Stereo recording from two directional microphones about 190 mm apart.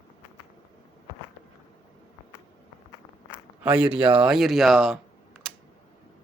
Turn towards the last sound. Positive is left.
turn(degrees=0)  # may be behind; listen again after turning